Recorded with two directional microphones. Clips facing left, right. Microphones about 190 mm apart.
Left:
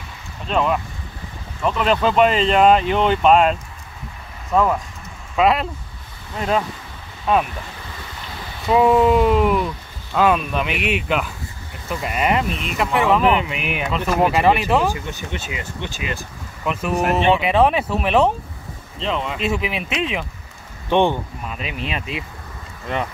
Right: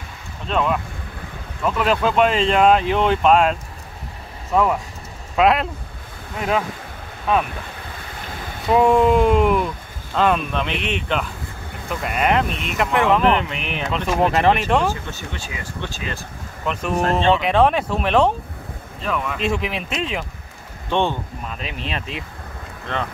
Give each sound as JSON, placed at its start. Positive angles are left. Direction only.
{"t": 0.5, "sound": "speech", "side_deg": 0}
{"t": 5.3, "sound": "speech", "side_deg": 0}
{"t": 8.6, "sound": "speech", "side_deg": 0}
{"t": 15.0, "sound": "speech", "side_deg": 20}
{"t": 18.9, "sound": "speech", "side_deg": 25}
{"t": 19.3, "sound": "speech", "side_deg": 5}
{"t": 20.9, "sound": "speech", "side_deg": 15}
{"t": 21.5, "sound": "speech", "side_deg": 5}